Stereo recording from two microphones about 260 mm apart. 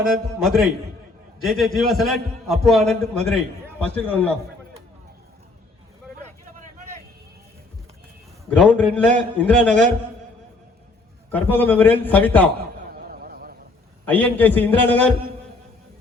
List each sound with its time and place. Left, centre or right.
0.4 s a man's voice: centre
8.4 s a man's voice: centre
11.3 s a man's voice: centre
12.9 s a sound: right
14.0 s a man's voice: centre